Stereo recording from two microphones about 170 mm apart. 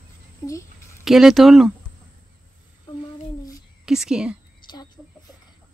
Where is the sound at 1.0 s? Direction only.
Centre (ahead or behind).